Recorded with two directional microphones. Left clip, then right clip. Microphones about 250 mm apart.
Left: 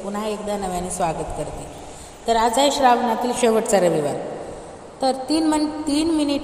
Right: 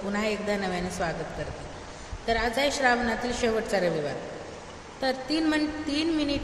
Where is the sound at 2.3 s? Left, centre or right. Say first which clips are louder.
Left 8 dB; left.